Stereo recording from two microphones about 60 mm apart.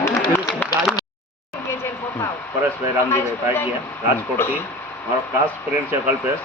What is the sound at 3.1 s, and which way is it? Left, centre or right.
Speech, left.